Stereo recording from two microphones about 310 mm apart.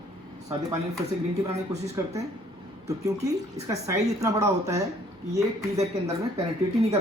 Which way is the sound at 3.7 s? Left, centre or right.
Centre.